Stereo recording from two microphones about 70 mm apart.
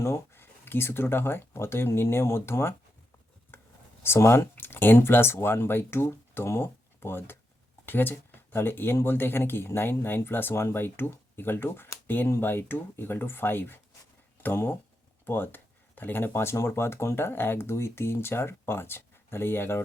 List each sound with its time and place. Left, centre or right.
0.0 s speech: left
4.0 s speech: left